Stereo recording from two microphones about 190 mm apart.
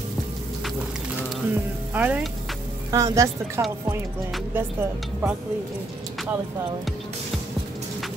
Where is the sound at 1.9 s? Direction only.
10° right (ahead or behind).